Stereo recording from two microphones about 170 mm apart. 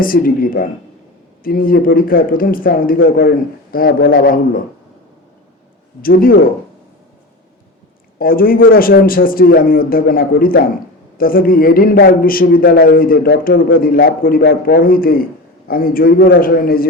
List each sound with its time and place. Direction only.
0.0 s a man's voice: 55° left (ahead or behind)
6.0 s a man's voice: 60° left (ahead or behind)
8.2 s a man's voice: 60° left (ahead or behind)